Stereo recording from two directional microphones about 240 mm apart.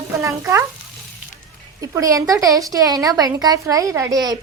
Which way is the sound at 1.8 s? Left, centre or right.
Centre.